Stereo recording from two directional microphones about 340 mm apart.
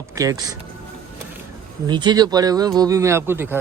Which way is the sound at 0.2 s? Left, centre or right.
Centre.